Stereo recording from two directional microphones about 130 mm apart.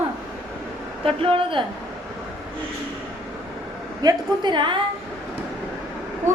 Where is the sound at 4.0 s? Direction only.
35° right (ahead or behind).